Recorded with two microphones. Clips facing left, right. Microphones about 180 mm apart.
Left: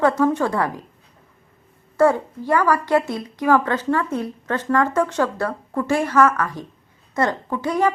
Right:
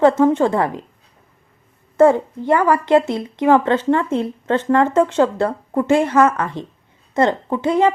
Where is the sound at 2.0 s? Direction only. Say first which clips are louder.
Right 4 dB; 25° right (ahead or behind).